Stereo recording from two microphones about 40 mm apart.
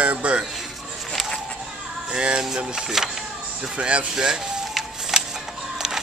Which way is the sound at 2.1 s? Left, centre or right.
Right.